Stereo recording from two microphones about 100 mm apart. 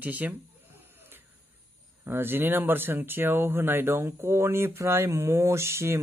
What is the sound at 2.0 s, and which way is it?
Speech, 20° right (ahead or behind).